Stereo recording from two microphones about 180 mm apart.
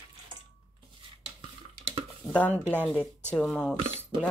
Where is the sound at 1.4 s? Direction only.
35° right (ahead or behind).